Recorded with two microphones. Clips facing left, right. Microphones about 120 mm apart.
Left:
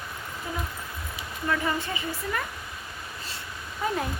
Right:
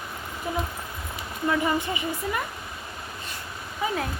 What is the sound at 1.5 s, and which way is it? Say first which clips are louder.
Speech: right 3 dB; 15° right (ahead or behind).